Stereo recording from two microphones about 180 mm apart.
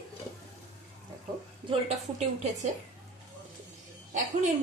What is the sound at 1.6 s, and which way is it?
Speech, 30° right (ahead or behind).